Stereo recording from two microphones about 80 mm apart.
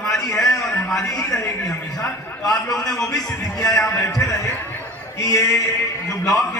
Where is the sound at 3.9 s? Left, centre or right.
Left.